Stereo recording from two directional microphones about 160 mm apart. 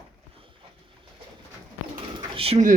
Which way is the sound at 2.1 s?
35° right (ahead or behind).